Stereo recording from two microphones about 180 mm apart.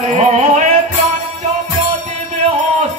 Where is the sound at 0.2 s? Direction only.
40° right (ahead or behind).